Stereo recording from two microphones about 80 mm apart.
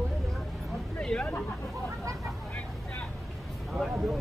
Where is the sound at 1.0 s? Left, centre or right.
Centre.